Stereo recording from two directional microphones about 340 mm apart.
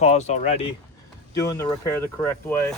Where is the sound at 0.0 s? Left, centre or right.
Centre.